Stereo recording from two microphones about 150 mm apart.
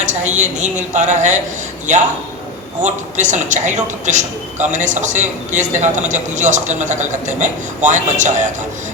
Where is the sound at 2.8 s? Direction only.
55° right (ahead or behind).